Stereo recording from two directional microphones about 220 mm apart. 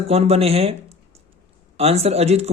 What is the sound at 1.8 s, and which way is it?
Speech, 30° right (ahead or behind).